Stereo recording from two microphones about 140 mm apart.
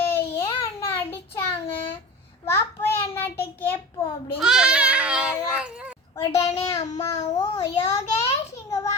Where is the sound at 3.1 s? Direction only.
15° left (ahead or behind).